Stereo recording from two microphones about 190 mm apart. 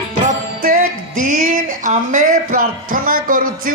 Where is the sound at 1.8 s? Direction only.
45° right (ahead or behind).